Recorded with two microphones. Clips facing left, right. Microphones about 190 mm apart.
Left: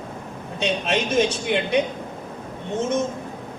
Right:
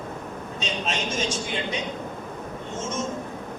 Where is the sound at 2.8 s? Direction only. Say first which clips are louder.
Left 8 dB; 60° left (ahead or behind).